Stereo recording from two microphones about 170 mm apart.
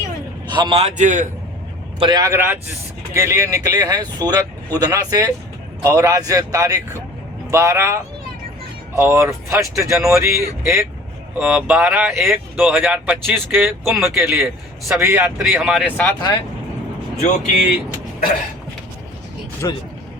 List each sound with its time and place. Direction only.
0.4 s a man's voice: 25° right (ahead or behind); by 1.3 s 45° right (ahead or behind)
2.0 s speech: 25° right (ahead or behind)
12.5 s speech: centre (ahead or behind)
14.8 s speech: 15° right (ahead or behind)
15.9 s speech: 10° left (ahead or behind)
17.2 s speech: 45° left (ahead or behind)
19.6 s speech: 20° left (ahead or behind)